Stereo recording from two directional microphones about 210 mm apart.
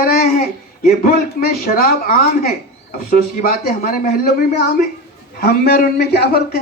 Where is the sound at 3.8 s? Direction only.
45° left (ahead or behind).